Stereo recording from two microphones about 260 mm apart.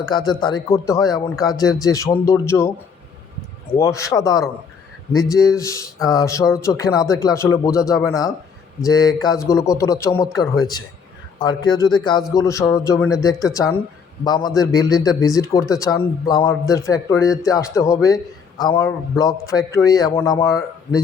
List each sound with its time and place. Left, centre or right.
0.0 s a man's voice: centre
3.8 s a man's voice: centre